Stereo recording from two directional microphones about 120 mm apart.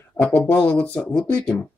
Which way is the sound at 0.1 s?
25° left (ahead or behind).